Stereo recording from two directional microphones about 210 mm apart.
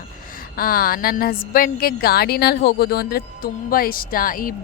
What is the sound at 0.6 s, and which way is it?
A woman's voice, 45° left (ahead or behind).